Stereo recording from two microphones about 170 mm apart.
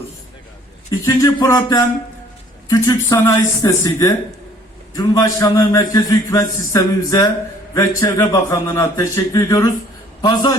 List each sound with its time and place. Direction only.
0.9 s a man's voice: 20° left (ahead or behind)